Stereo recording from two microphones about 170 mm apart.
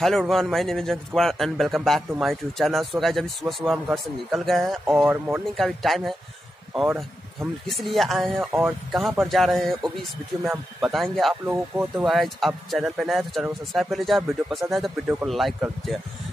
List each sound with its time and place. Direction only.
0.3 s speech: centre (ahead or behind)
11.4 s speech: 10° right (ahead or behind)